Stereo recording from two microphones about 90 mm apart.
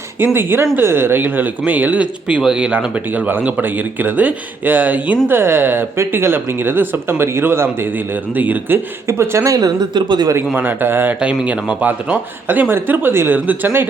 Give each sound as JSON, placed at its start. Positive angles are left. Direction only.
{"t": 0.3, "sound": "a man's voice", "side_deg": -25}
{"t": 9.0, "sound": "speech", "side_deg": -30}
{"t": 10.3, "sound": "a man's voice", "side_deg": -20}